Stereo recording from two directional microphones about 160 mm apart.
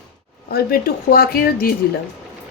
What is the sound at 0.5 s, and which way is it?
Speech, 70° left (ahead or behind).